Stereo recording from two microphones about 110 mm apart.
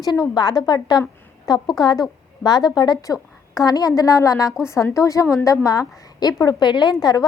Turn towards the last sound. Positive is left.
turn(degrees=35)  # may be behind; listen again after turning